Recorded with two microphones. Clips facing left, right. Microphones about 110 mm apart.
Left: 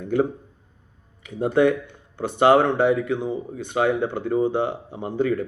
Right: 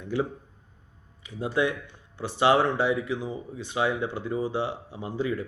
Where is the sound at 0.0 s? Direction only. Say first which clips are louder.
Left 7 dB; 50° left (ahead or behind).